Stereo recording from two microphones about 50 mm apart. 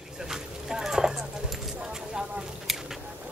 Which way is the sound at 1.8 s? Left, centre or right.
Centre.